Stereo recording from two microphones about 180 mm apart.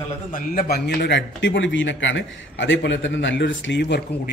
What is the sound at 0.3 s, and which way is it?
A man's voice, 55° left (ahead or behind).